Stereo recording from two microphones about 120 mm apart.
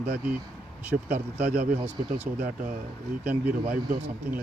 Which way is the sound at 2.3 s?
90° right.